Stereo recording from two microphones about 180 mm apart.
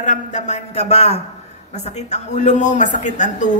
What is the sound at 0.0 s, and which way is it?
A man's voice, 40° left (ahead or behind).